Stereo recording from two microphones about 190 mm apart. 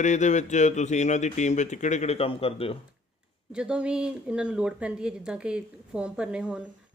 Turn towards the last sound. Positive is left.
turn(degrees=-5)  # may be behind; listen again after turning